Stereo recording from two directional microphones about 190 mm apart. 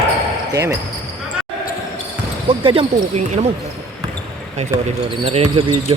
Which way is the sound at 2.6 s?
25° right (ahead or behind).